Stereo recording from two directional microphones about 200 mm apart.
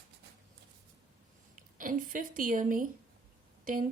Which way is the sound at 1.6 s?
40° right (ahead or behind).